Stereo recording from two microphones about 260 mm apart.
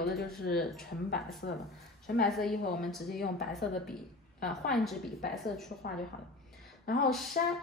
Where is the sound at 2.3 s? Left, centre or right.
Centre.